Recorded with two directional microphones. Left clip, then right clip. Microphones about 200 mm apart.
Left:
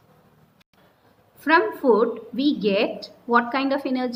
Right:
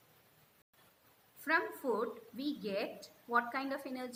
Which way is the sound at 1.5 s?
35° left (ahead or behind).